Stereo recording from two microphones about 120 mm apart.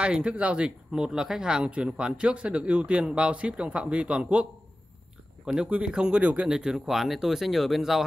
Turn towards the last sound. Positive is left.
turn(degrees=0)  # may be behind; listen again after turning